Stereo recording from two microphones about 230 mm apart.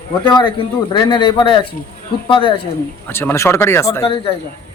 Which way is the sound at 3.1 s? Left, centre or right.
Centre.